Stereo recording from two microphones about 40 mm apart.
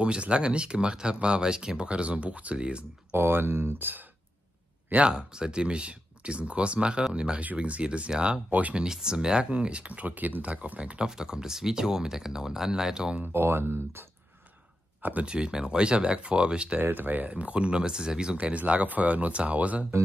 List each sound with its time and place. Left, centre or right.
0.0 s speech: right
3.2 s speech: right
5.0 s speech: right
8.5 s speech: right
8.9 s speech: centre
11.1 s speech: centre
13.3 s speech: right
15.0 s speech: right
15.2 s speech: right
16.8 s speech: right; by 18.4 s centre
18.4 s speech: right